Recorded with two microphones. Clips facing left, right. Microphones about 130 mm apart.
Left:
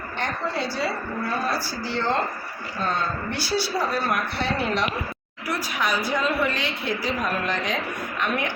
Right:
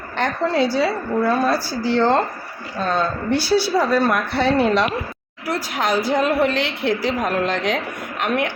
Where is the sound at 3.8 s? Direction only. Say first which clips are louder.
Right 7 dB; 90° right.